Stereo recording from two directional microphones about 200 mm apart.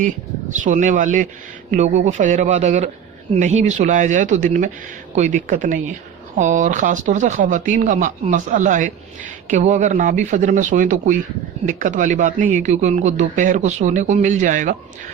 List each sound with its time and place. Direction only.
0.6 s speech: 40° right (ahead or behind)